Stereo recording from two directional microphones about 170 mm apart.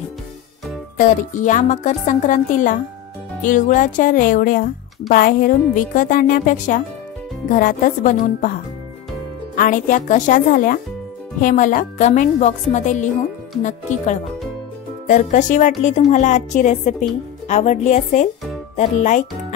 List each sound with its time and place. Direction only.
0.9 s speech: 50° left (ahead or behind)
9.6 s speech: 50° left (ahead or behind)